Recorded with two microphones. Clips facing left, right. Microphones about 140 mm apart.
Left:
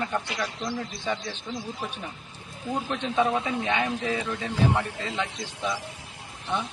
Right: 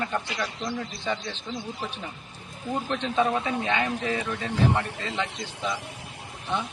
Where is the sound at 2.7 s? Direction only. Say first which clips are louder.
Even; 10° left (ahead or behind).